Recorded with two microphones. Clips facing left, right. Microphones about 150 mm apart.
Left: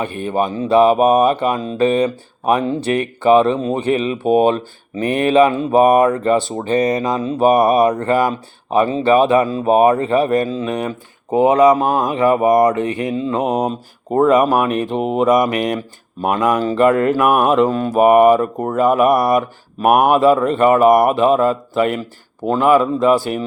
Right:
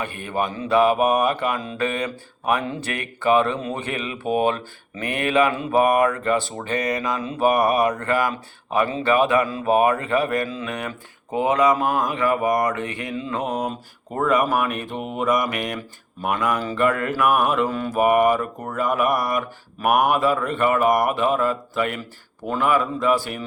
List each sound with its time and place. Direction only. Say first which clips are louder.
0.0 s speech: left 6 dB; 30° left (ahead or behind)